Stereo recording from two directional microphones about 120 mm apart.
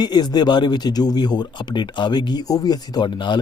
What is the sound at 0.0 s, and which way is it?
Speech, 35° left (ahead or behind).